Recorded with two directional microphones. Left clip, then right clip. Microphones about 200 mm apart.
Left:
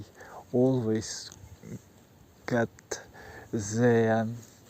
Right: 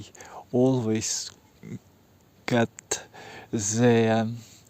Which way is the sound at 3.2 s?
60° right (ahead or behind).